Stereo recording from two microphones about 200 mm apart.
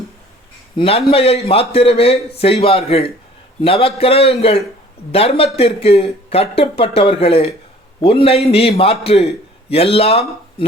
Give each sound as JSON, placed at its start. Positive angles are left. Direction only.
{"t": 0.8, "sound": "a man's voice", "side_deg": 30}